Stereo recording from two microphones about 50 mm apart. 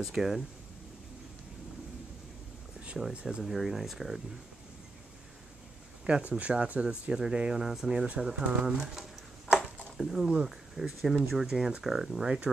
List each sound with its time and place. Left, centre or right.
0.0 s speech: centre
3.1 s speech: centre
3.4 s speech: centre
6.0 s speech: right